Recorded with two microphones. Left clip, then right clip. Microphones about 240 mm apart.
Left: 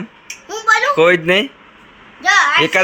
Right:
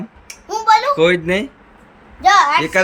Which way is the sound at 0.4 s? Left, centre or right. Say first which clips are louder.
Right 2 dB; right.